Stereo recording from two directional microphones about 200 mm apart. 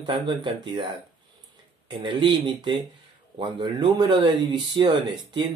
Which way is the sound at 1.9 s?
25° right (ahead or behind).